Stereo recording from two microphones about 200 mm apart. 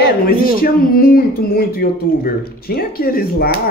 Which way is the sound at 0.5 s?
45° left (ahead or behind).